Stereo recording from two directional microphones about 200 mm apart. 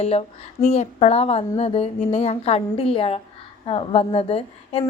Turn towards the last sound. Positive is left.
turn(degrees=30)  # may be behind; listen again after turning